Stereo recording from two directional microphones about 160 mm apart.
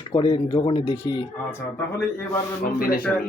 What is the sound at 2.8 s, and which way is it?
Speech, 65° left (ahead or behind).